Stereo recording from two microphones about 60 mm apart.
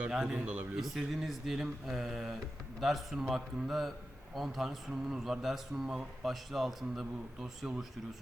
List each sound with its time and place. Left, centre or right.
0.1 s a man's voice: centre
0.8 s speech: centre